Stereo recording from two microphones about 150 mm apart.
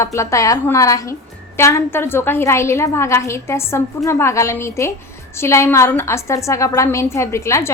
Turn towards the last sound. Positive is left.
turn(degrees=20)  # may be behind; listen again after turning